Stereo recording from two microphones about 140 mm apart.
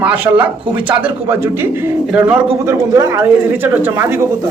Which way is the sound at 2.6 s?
20° right (ahead or behind).